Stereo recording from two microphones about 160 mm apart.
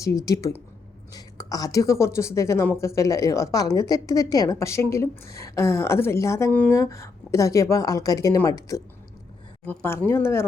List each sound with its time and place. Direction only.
0.0 s a woman's voice: 20° left (ahead or behind)